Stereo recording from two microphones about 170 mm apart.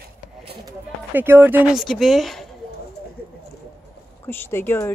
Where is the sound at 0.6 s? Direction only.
10° right (ahead or behind).